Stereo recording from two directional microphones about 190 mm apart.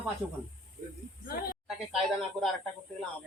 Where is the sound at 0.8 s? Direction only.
45° right (ahead or behind).